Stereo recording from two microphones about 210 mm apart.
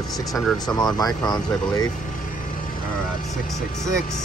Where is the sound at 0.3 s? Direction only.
Centre (ahead or behind).